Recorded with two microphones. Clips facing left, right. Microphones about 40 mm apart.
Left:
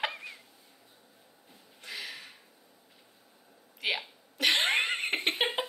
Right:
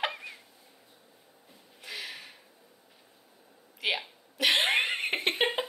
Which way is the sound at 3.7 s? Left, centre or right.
Centre.